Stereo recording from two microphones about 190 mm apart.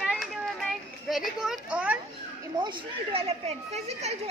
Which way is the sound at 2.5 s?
25° right (ahead or behind).